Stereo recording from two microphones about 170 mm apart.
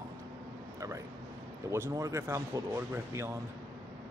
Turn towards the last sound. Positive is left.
turn(degrees=-15)  # may be behind; listen again after turning